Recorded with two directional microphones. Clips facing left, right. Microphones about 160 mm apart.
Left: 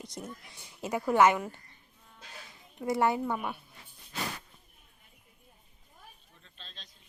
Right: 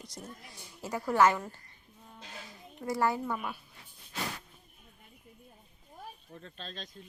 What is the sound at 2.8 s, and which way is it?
Speech, 20° left (ahead or behind).